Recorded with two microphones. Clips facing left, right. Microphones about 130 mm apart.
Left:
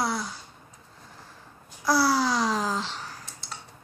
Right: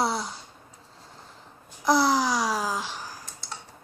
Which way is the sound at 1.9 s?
20° right (ahead or behind).